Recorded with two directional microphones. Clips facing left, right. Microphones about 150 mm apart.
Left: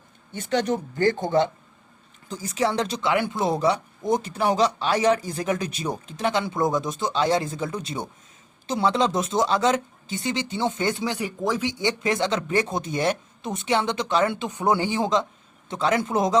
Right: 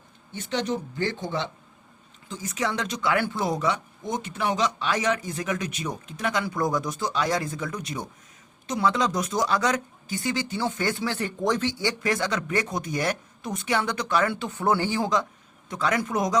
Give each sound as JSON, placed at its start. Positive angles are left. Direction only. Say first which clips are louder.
{"t": 0.3, "sound": "speech", "louder": "left 4 dB", "side_deg": 50}
{"t": 2.3, "sound": "speech", "louder": "left 4 dB", "side_deg": 30}
{"t": 11.7, "sound": "speech", "louder": "left 2 dB", "side_deg": 20}